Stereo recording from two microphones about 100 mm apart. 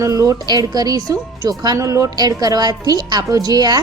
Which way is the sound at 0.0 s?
35° right (ahead or behind).